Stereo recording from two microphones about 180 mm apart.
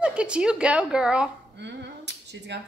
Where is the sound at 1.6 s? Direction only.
75° right (ahead or behind).